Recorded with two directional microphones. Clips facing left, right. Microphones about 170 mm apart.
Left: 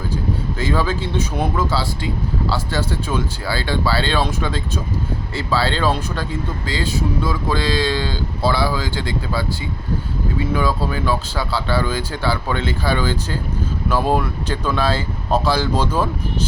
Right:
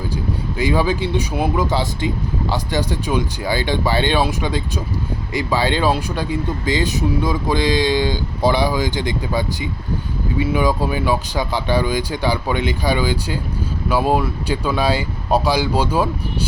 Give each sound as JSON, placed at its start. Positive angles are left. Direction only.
{"t": 0.6, "sound": "speech", "side_deg": -15}